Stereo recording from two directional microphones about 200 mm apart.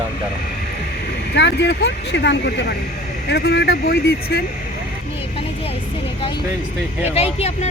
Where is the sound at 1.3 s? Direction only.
60° left (ahead or behind).